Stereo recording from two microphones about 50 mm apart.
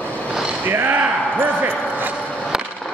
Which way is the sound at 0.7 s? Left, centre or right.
Right.